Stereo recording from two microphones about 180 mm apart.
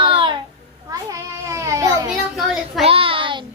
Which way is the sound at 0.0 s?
25° right (ahead or behind).